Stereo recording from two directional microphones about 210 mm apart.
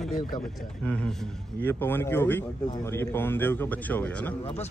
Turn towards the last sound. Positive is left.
turn(degrees=5)  # may be behind; listen again after turning